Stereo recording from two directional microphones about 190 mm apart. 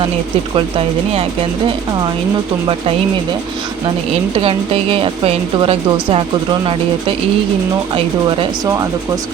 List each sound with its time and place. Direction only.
0.5 s speech: 30° right (ahead or behind)
4.4 s speech: 30° right (ahead or behind)
7.9 s speech: 25° right (ahead or behind)